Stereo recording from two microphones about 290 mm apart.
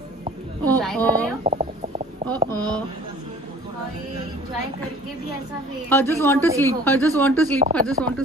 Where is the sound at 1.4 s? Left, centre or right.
Right.